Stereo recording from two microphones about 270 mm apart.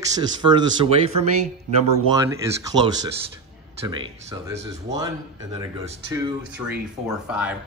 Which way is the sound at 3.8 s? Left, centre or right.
Centre.